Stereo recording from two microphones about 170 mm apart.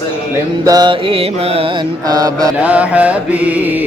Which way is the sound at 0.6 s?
25° right (ahead or behind).